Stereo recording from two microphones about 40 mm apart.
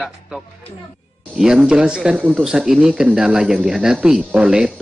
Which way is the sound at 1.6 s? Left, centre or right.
Right.